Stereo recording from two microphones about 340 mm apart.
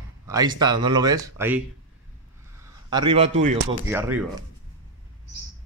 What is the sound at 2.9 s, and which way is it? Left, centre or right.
Speech, centre.